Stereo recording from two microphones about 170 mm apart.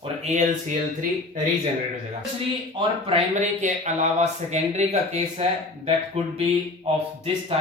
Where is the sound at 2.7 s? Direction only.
35° right (ahead or behind).